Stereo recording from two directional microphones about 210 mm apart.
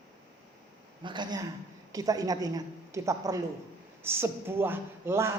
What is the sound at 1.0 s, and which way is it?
A woman's voice, 20° right (ahead or behind).